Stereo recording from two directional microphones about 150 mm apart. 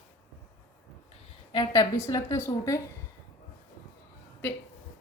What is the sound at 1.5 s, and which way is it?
Speech, 25° left (ahead or behind).